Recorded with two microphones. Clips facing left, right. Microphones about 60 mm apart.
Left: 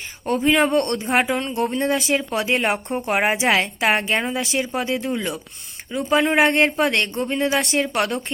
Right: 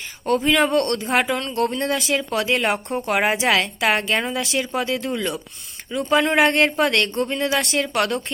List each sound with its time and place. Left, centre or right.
0.3 s speech: centre
2.5 s speech: centre